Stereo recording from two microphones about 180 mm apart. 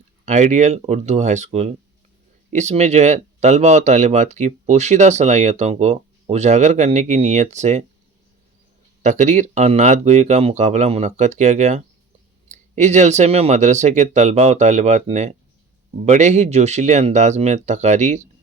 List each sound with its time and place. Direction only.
0.3 s speech: 40° right (ahead or behind)
9.0 s speech: 40° right (ahead or behind)